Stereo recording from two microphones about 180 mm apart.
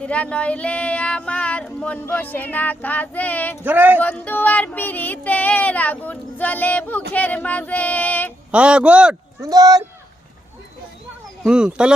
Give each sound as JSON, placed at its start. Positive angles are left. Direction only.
{"t": 0.0, "sound": "a sound", "side_deg": 5}
{"t": 3.6, "sound": "speech", "side_deg": -10}
{"t": 4.0, "sound": "a sound", "side_deg": 10}
{"t": 8.5, "sound": "speech", "side_deg": -5}
{"t": 9.4, "sound": "speech", "side_deg": -20}
{"t": 11.4, "sound": "speech", "side_deg": -5}